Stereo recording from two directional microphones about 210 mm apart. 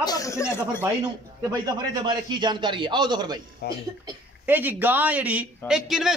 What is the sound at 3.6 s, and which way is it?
Speech, 50° left (ahead or behind).